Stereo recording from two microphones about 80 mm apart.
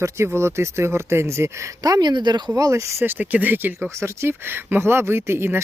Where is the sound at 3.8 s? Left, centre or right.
Right.